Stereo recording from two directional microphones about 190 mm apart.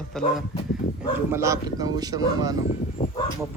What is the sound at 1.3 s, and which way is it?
Speech, 15° right (ahead or behind).